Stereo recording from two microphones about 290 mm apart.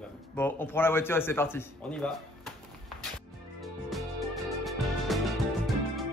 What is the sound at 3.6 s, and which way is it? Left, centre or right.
Music, centre.